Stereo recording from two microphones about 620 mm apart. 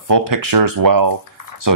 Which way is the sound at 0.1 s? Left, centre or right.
Right.